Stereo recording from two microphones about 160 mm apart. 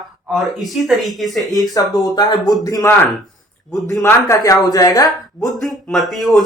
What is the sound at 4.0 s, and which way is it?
A man's voice, 20° left (ahead or behind).